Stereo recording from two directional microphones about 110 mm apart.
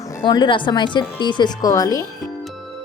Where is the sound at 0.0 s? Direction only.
25° left (ahead or behind).